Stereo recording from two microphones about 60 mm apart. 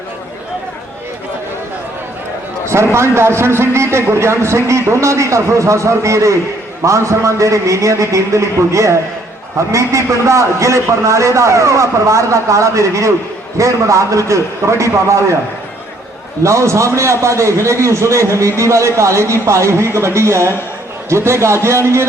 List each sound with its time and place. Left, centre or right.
2.6 s a man's voice: right
16.4 s a man's voice: right